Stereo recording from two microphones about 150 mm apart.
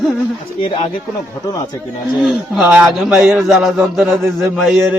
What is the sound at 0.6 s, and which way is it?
Speech, 35° left (ahead or behind).